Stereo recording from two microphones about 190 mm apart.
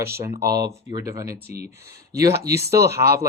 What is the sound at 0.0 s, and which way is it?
Speech, 15° right (ahead or behind).